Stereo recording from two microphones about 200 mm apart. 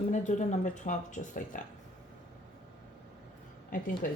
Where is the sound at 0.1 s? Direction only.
40° left (ahead or behind).